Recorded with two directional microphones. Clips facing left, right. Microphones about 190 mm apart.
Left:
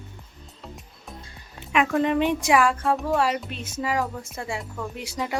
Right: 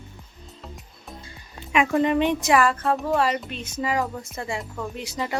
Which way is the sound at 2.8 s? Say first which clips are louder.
Even; centre (ahead or behind).